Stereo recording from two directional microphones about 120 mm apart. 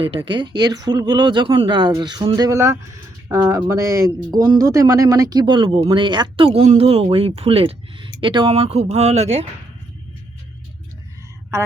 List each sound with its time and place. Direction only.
0.0 s speech: 45° right (ahead or behind); by 9.5 s 65° right (ahead or behind)